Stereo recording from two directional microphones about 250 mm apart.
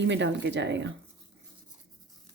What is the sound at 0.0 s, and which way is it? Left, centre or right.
Speech, right.